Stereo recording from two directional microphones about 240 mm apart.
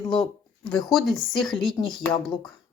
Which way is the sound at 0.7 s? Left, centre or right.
Centre.